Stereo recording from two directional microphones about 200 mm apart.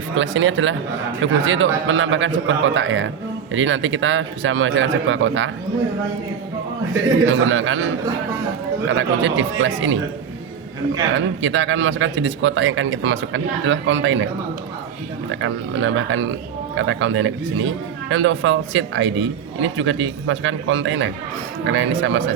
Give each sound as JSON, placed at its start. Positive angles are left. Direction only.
{"t": 0.1, "sound": "speech", "side_deg": -75}
{"t": 7.3, "sound": "speech", "side_deg": -75}
{"t": 8.9, "sound": "speech", "side_deg": -70}
{"t": 11.1, "sound": "speech", "side_deg": -70}
{"t": 15.3, "sound": "speech", "side_deg": -75}